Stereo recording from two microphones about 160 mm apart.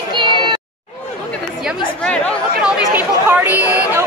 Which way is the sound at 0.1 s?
30° right (ahead or behind).